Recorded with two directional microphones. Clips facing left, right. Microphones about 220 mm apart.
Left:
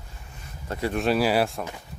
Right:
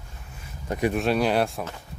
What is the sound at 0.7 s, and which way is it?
Speech, 15° right (ahead or behind).